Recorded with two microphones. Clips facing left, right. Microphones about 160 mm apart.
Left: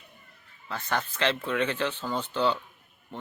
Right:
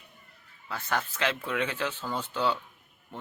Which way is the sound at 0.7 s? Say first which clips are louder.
Left 1 dB; 5° right (ahead or behind).